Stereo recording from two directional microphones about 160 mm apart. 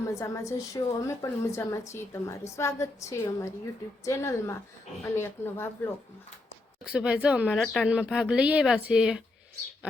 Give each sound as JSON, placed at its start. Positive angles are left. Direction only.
{"t": 0.1, "sound": "a woman's voice", "side_deg": 20}
{"t": 6.9, "sound": "speech", "side_deg": -5}